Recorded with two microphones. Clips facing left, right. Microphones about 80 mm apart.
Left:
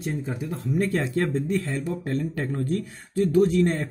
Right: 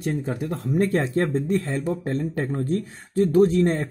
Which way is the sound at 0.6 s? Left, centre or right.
Right.